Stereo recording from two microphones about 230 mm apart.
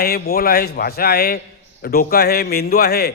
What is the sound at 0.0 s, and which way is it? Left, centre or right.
A man's voice, left.